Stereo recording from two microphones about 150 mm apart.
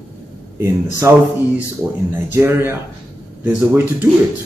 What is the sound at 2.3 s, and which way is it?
Speech, 15° right (ahead or behind).